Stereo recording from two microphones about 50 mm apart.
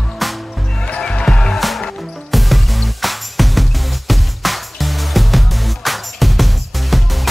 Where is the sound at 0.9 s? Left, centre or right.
Centre.